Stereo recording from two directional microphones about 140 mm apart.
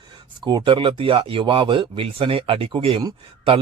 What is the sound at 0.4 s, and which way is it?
A man's voice, 35° right (ahead or behind).